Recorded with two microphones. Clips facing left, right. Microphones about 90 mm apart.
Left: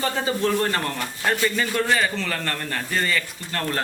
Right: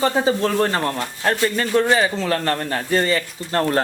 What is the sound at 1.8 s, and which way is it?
Speech, 20° right (ahead or behind).